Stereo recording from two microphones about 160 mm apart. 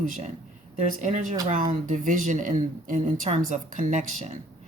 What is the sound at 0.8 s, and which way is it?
Speech, 50° right (ahead or behind).